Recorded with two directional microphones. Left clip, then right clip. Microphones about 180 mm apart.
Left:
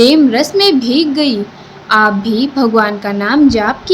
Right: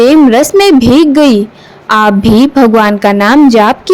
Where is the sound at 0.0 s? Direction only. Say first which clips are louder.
Right 4 dB; 50° right (ahead or behind).